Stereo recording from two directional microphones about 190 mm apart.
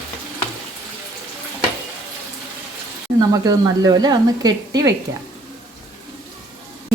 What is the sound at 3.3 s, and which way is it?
Speech, 20° right (ahead or behind).